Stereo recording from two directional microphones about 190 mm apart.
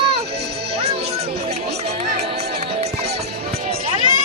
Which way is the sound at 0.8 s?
35° right (ahead or behind).